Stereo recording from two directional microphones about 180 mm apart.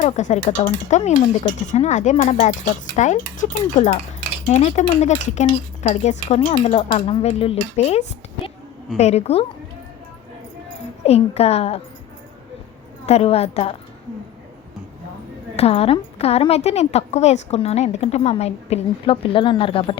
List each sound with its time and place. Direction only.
0.0 s a woman's voice: 45° left (ahead or behind)
11.0 s a woman's voice: 35° left (ahead or behind)
13.1 s a woman's voice: 35° left (ahead or behind)
15.5 s a woman's voice: 35° left (ahead or behind)